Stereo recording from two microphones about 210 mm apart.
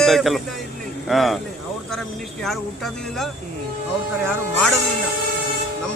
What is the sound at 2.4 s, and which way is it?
A man's voice, centre (ahead or behind).